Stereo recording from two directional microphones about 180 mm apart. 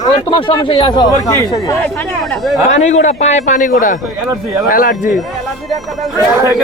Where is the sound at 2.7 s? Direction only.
40° left (ahead or behind).